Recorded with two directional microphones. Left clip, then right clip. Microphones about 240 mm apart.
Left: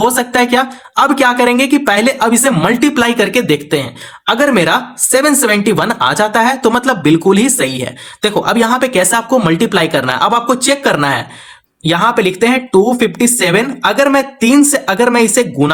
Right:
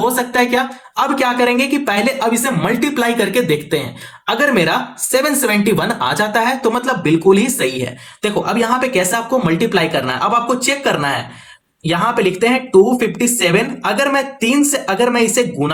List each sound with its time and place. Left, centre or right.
0.9 s speech: left